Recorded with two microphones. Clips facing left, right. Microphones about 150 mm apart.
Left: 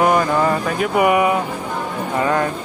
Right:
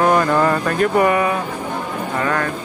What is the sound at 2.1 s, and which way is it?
Speech, 20° left (ahead or behind).